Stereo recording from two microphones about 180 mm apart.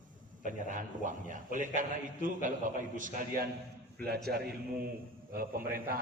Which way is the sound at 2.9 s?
50° right (ahead or behind).